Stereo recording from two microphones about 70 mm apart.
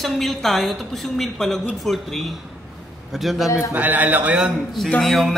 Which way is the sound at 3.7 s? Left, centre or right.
Right.